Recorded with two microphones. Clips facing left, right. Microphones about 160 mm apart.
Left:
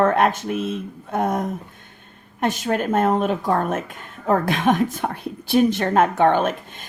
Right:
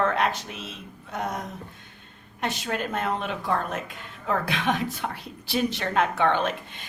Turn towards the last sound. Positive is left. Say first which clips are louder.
# left 5 dB
turn(degrees=45)  # may be behind; listen again after turning